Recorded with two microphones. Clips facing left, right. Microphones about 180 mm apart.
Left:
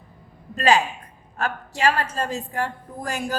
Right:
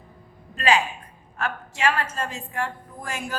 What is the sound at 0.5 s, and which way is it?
A man's voice, 40° left (ahead or behind).